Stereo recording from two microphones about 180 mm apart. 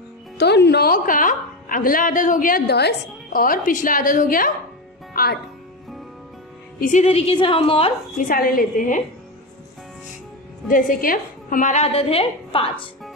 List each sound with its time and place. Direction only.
0.4 s a woman's voice: 65° left (ahead or behind)
6.8 s a woman's voice: 40° left (ahead or behind)
8.2 s a woman's voice: 50° left (ahead or behind)
10.7 s a woman's voice: 50° left (ahead or behind); by 12.9 s 30° left (ahead or behind)